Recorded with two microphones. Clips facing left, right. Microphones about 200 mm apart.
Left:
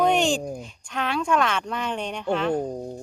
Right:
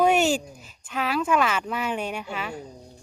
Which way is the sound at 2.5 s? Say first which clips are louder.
Left 12 dB; 50° left (ahead or behind).